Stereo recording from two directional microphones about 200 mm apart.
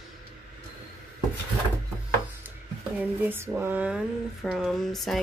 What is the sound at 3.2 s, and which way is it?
Speech, 10° right (ahead or behind).